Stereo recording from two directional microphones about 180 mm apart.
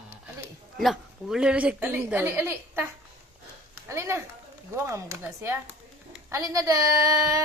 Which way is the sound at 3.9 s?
15° right (ahead or behind).